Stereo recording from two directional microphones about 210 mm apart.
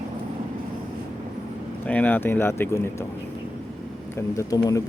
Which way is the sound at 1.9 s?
5° left (ahead or behind).